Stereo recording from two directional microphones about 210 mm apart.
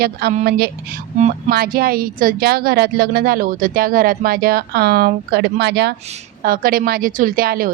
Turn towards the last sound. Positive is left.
turn(degrees=-45)  # may be behind; listen again after turning